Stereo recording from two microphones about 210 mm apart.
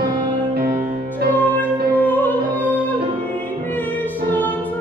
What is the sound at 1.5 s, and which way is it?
Music, 10° left (ahead or behind).